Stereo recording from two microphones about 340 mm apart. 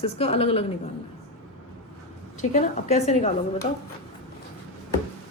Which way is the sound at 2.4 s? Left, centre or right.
Centre.